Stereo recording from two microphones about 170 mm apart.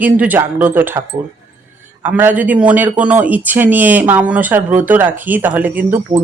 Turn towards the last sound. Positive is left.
turn(degrees=-10)  # may be behind; listen again after turning